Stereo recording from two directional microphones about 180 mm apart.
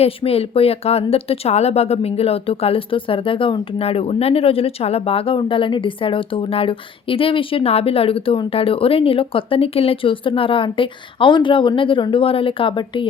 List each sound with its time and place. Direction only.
0.0 s speech: 35° left (ahead or behind)